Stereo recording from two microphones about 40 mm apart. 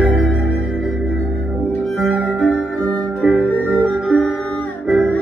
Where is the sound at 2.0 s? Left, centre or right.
Left.